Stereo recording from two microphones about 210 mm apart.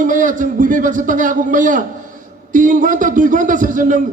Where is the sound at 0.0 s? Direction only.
40° right (ahead or behind).